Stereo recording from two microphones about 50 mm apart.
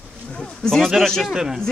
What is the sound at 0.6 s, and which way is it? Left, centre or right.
Speech, centre.